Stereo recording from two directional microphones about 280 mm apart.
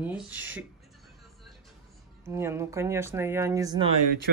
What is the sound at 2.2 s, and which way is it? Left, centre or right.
Speech, centre.